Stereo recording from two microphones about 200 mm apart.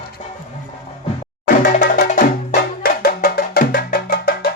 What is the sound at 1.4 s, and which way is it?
Music, 40° left (ahead or behind).